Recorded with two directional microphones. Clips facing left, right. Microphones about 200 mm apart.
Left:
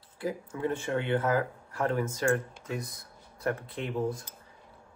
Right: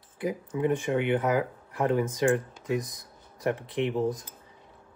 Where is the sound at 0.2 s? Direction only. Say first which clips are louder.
Right 4 dB; 20° right (ahead or behind).